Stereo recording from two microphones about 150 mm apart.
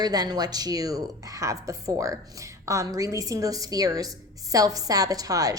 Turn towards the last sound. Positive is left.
turn(degrees=-25)  # may be behind; listen again after turning